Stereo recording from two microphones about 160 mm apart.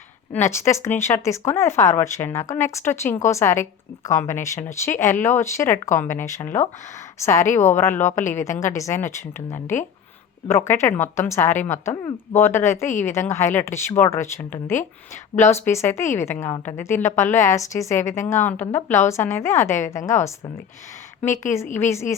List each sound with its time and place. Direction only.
0.3 s a woman's voice: 15° left (ahead or behind)
7.4 s a woman's voice: 50° left (ahead or behind)
7.8 s a woman's voice: 15° left (ahead or behind)
21.2 s speech: 15° left (ahead or behind)